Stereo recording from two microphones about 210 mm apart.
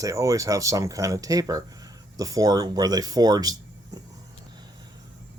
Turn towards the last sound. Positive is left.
turn(degrees=-20)  # may be behind; listen again after turning